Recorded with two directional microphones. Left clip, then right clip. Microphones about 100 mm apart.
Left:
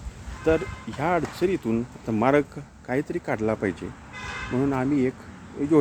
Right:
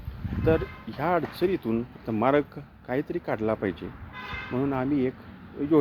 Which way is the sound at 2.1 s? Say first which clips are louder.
Left 2 dB; 30° left (ahead or behind).